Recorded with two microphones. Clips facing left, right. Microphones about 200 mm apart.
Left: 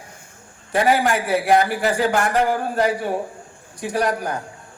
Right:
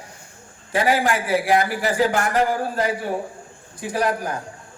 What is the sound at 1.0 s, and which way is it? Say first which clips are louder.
Speech: left 1 dB; 45° left (ahead or behind).